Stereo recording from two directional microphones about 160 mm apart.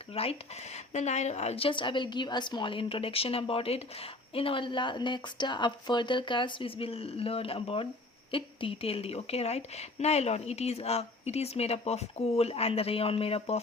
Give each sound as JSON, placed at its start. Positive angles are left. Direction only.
{"t": 0.1, "sound": "a woman's voice", "side_deg": 40}